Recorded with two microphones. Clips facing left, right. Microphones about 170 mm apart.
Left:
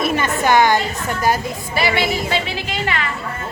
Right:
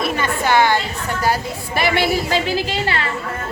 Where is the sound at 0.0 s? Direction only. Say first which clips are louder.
Left 2 dB; 15° left (ahead or behind).